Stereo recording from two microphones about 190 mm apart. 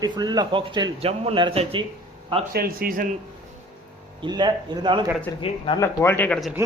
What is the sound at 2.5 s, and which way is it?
Speech, 50° right (ahead or behind).